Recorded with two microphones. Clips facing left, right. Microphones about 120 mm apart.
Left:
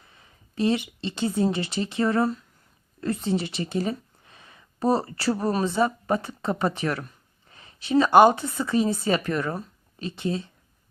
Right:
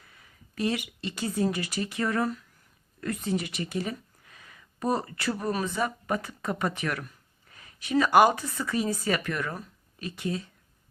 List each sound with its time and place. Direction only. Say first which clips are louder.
0.0 s speech: left 1 dB; 25° left (ahead or behind)